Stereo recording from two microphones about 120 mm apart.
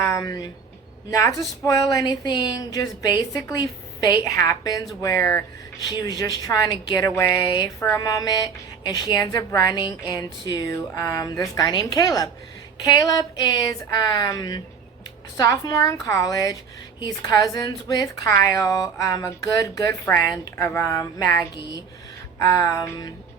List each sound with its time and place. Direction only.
0.1 s speech: 30° left (ahead or behind)
1.6 s a woman's voice: 30° left (ahead or behind)